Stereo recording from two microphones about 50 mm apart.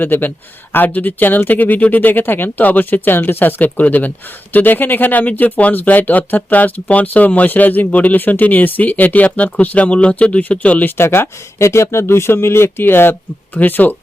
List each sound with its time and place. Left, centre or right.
0.0 s speech: left
10.8 s speech: left
11.6 s speech: left